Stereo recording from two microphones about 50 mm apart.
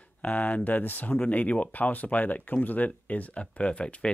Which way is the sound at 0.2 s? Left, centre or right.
Left.